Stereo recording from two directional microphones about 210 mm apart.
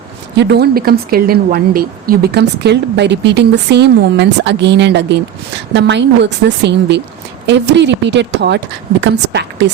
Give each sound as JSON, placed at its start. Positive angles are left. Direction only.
{"t": 0.3, "sound": "a woman's voice", "side_deg": -50}